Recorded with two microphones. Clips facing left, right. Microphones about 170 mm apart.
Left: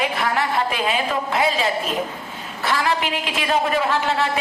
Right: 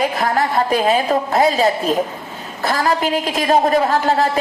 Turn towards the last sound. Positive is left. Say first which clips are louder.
# right 5 dB
turn(degrees=-40)  # may be behind; listen again after turning